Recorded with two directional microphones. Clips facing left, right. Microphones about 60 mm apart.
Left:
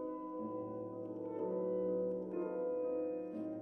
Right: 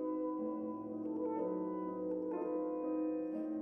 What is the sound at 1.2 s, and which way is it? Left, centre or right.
French horn, right.